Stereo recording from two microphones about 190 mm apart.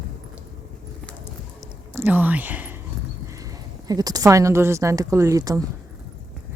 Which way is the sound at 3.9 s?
20° right (ahead or behind).